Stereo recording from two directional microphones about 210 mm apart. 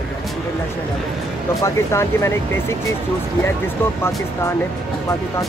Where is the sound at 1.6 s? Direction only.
15° left (ahead or behind).